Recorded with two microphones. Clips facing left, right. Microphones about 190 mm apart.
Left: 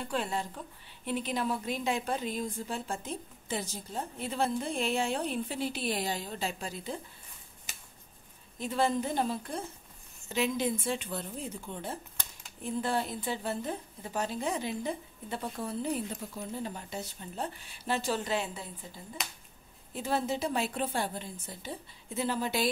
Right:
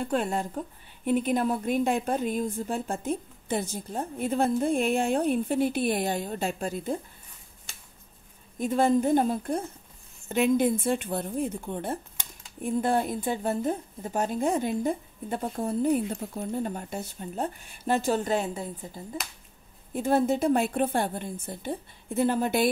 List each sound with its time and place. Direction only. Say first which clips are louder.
0.0 s a woman's voice: right 6 dB; 50° right (ahead or behind)
8.5 s a woman's voice: right 7 dB; 50° right (ahead or behind)
19.2 s speech: even; centre (ahead or behind)
19.9 s a woman's voice: right 8 dB; 50° right (ahead or behind)